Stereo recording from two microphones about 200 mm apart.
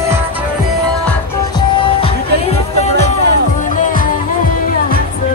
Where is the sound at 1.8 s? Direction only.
25° left (ahead or behind); by 4.1 s 45° left (ahead or behind).